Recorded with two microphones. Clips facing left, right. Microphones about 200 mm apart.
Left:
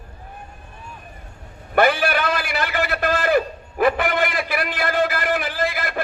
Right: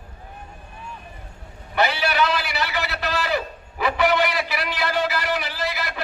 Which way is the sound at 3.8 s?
50° left (ahead or behind).